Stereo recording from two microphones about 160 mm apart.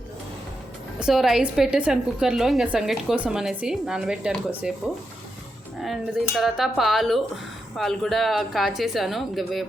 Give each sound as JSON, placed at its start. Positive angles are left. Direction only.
{"t": 0.9, "sound": "a woman's voice", "side_deg": 0}
{"t": 5.8, "sound": "a woman's voice", "side_deg": 0}